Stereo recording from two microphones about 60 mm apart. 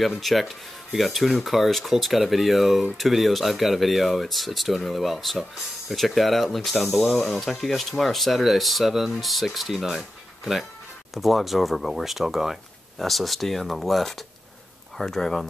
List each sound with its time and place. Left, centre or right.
0.2 s speech: centre